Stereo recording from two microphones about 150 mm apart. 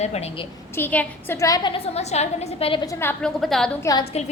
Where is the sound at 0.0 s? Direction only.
45° left (ahead or behind).